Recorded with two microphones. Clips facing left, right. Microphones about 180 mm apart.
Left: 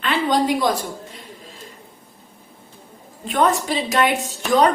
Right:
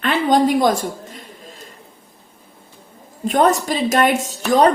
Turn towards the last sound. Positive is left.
turn(degrees=-40)  # may be behind; listen again after turning